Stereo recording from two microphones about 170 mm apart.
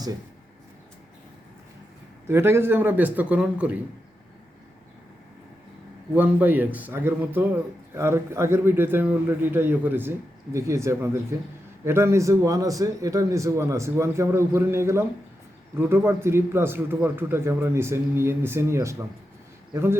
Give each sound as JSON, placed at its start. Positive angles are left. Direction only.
{"t": 2.2, "sound": "a man's voice", "side_deg": -15}
{"t": 6.1, "sound": "a man's voice", "side_deg": -10}